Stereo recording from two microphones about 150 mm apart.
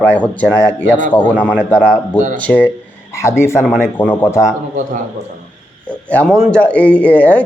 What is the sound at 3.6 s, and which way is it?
Speech, 5° right (ahead or behind).